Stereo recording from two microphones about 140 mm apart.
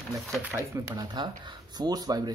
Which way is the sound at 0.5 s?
20° right (ahead or behind).